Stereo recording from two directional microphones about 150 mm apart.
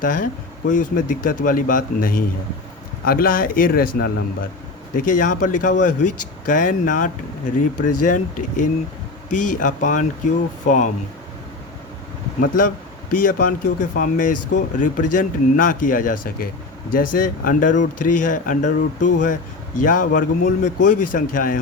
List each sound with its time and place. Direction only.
0.0 s a man's voice: 65° left (ahead or behind)
4.9 s speech: 60° left (ahead or behind)
12.4 s a man's voice: 65° left (ahead or behind)